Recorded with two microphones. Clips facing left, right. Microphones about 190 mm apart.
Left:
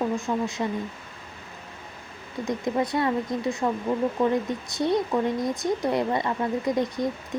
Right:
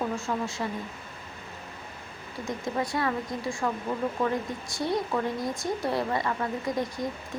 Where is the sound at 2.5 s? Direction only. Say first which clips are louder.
Left 5 dB; 20° left (ahead or behind).